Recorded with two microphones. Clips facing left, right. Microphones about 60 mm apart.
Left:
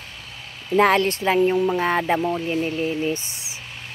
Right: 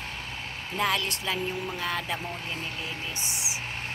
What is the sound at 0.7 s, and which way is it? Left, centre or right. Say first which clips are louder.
Speech: left 11 dB; left.